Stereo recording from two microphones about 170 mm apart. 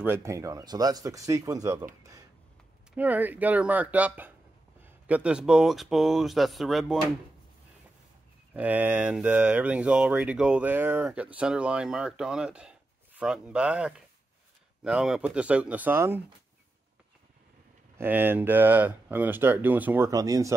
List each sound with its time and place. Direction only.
0.0 s speech: 15° right (ahead or behind)
3.0 s speech: 10° right (ahead or behind)
8.5 s speech: 10° right (ahead or behind)
17.9 s speech: 10° right (ahead or behind)